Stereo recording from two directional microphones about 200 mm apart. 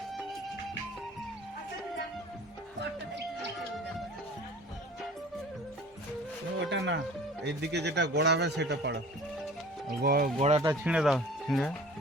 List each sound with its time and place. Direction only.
6.7 s a man's voice: 60° right (ahead or behind)
10.0 s speech: 50° right (ahead or behind)
10.3 s speech: 30° right (ahead or behind)
10.8 s speech: 5° right (ahead or behind)